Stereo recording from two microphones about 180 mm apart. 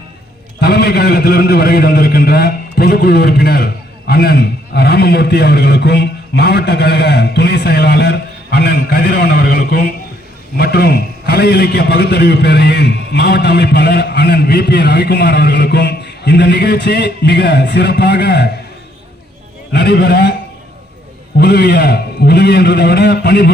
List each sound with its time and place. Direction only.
0.6 s a man's voice: 65° left (ahead or behind)
19.7 s a man's voice: 70° left (ahead or behind)
21.3 s a man's voice: 65° left (ahead or behind)